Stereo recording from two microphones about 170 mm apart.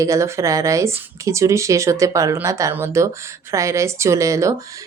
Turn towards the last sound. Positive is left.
turn(degrees=-20)  # may be behind; listen again after turning